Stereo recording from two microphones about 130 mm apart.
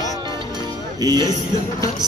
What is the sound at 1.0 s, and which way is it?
Music, 30° right (ahead or behind).